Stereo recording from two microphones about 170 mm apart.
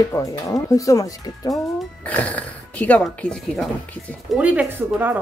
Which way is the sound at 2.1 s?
10° left (ahead or behind).